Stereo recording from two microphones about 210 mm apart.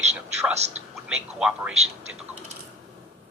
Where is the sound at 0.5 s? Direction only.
30° right (ahead or behind).